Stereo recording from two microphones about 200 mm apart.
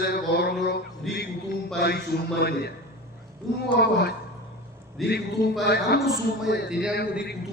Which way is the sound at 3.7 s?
55° left (ahead or behind).